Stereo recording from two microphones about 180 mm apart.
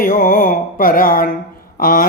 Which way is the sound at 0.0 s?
50° left (ahead or behind).